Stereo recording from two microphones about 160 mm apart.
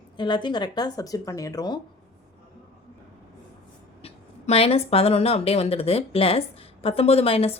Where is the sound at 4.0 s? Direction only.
40° left (ahead or behind).